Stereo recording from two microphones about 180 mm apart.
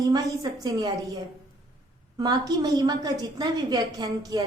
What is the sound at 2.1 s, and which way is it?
A woman's voice, 25° right (ahead or behind).